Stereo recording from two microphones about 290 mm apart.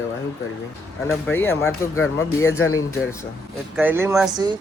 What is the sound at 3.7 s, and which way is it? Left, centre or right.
Speech, centre.